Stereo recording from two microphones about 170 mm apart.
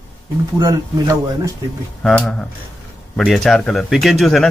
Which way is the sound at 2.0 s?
5° left (ahead or behind).